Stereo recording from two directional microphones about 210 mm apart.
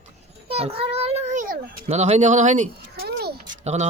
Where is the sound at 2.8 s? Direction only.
50° right (ahead or behind).